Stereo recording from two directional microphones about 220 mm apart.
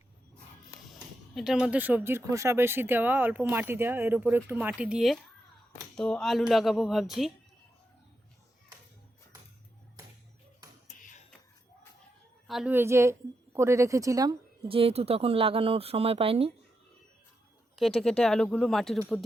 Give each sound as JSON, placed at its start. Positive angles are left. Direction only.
{"t": 1.4, "sound": "speech", "side_deg": -5}
{"t": 12.5, "sound": "a woman's voice", "side_deg": -5}
{"t": 17.7, "sound": "speech", "side_deg": 0}